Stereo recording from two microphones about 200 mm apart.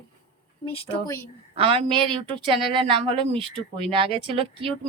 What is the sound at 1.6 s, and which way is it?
Speech, 30° right (ahead or behind).